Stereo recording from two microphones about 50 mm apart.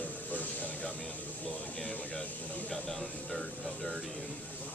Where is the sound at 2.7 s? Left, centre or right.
Centre.